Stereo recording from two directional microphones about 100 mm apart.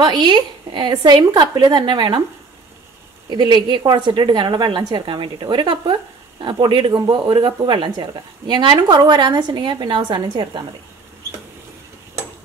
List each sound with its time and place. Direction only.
0.0 s speech: 50° right (ahead or behind)
3.3 s speech: 45° right (ahead or behind)